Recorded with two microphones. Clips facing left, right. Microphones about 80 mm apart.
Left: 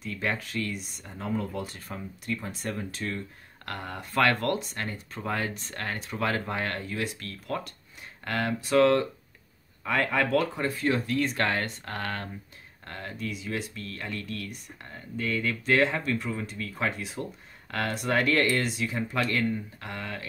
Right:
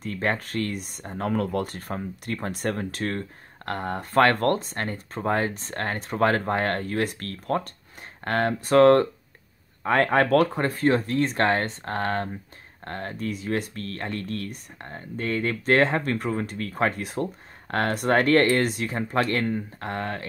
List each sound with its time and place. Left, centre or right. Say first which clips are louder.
0.0 s speech: right 4 dB; right
3.7 s speech: right 7 dB; right